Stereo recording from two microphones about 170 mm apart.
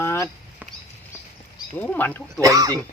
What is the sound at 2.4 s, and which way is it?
Speech, 20° right (ahead or behind).